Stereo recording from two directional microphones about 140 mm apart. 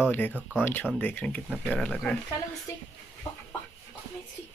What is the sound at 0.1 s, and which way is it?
Speech, 10° left (ahead or behind).